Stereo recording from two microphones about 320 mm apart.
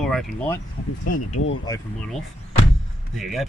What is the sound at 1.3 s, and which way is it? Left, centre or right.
Speech, left.